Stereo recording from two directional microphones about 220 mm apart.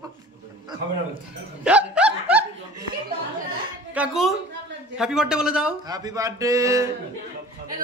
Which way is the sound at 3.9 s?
Centre (ahead or behind).